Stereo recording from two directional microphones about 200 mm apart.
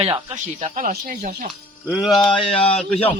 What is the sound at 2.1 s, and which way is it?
Speech, 25° left (ahead or behind).